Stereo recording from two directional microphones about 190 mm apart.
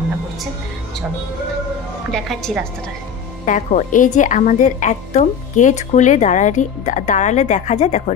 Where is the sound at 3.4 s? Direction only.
40° left (ahead or behind).